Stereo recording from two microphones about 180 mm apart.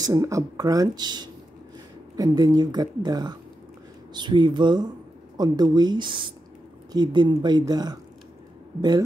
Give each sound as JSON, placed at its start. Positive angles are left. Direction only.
{"t": 0.0, "sound": "speech", "side_deg": -20}